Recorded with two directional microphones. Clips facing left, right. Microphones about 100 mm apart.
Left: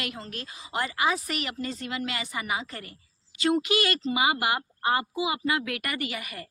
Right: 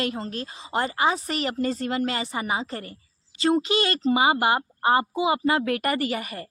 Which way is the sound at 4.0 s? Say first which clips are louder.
Right 5 dB; 40° right (ahead or behind).